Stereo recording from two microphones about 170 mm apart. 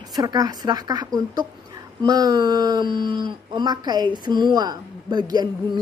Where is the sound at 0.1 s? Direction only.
20° right (ahead or behind).